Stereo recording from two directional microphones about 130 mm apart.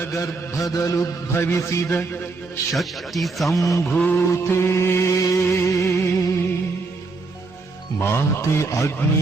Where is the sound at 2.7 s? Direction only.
Centre (ahead or behind).